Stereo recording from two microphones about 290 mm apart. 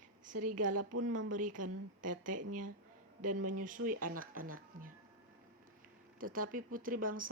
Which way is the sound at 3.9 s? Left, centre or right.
Right.